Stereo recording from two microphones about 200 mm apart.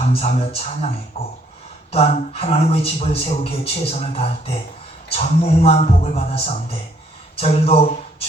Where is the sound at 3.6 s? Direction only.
30° left (ahead or behind).